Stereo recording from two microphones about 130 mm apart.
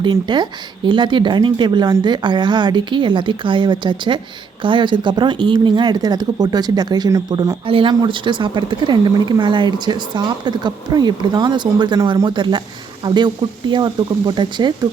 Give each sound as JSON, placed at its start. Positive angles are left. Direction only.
{"t": 0.0, "sound": "speech", "side_deg": -35}
{"t": 7.7, "sound": "speech", "side_deg": -40}